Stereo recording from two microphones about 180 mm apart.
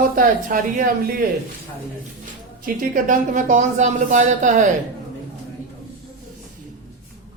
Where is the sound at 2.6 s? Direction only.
50° right (ahead or behind).